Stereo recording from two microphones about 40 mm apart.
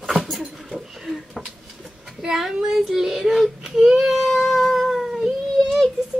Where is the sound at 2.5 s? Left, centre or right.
Centre.